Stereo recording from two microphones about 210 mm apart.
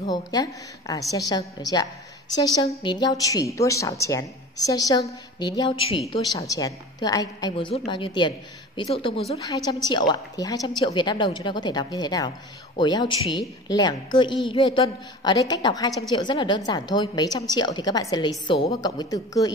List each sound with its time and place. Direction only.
0.0 s a woman's voice: 20° left (ahead or behind)